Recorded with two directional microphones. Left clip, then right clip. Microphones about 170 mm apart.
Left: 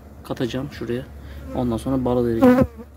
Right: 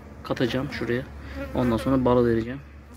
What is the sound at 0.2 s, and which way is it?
Speech, 20° left (ahead or behind).